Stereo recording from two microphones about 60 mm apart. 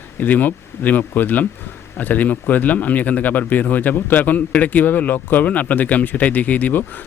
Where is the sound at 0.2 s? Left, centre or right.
Left.